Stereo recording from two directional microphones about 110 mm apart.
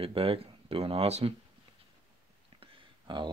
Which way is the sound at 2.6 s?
50° right (ahead or behind).